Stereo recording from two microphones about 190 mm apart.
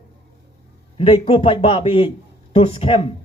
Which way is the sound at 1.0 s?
30° left (ahead or behind).